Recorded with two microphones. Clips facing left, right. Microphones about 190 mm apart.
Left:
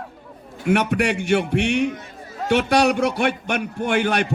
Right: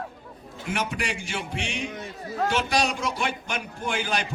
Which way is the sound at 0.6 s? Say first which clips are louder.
Left 10 dB; 65° left (ahead or behind).